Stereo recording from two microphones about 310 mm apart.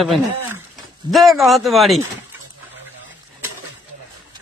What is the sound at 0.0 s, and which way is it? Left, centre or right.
Speech, centre.